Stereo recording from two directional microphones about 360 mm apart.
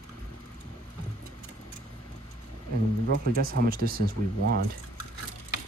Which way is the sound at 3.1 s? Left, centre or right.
Right.